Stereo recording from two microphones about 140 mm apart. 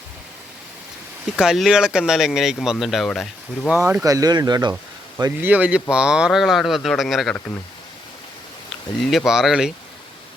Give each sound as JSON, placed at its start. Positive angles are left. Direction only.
{"t": 1.4, "sound": "speech", "side_deg": -5}
{"t": 3.8, "sound": "speech", "side_deg": -20}
{"t": 5.4, "sound": "speech", "side_deg": -10}
{"t": 9.0, "sound": "speech", "side_deg": 0}